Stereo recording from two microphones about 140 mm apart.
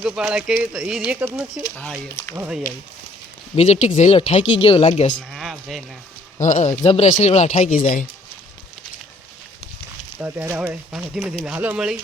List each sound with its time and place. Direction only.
0.0 s speech: centre (ahead or behind)
3.5 s speech: 50° left (ahead or behind)
5.1 s a sound: centre (ahead or behind)
6.4 s speech: 55° left (ahead or behind)
6.8 s speech: 45° left (ahead or behind)
7.2 s speech: 55° left (ahead or behind)
7.8 s speech: 75° left (ahead or behind)
10.2 s speech: 15° right (ahead or behind)